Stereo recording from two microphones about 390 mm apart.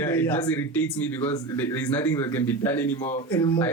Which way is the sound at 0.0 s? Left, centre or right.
Centre.